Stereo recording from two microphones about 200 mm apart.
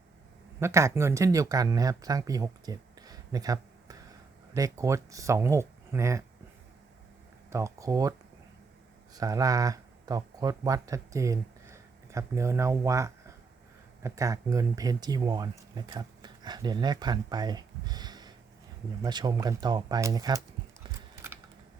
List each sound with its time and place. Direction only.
0.6 s speech: 15° right (ahead or behind)
7.5 s speech: 15° right (ahead or behind)
9.1 s speech: 15° right (ahead or behind)